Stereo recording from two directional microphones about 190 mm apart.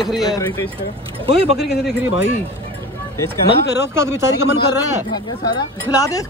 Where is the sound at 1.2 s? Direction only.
30° right (ahead or behind).